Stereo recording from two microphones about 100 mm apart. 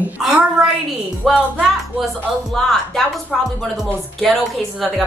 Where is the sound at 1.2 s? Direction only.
Centre (ahead or behind).